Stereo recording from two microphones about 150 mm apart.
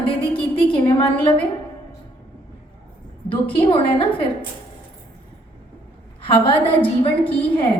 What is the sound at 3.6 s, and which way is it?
Speech, 35° left (ahead or behind).